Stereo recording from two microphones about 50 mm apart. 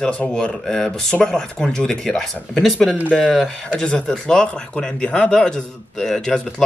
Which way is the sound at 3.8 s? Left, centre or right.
Centre.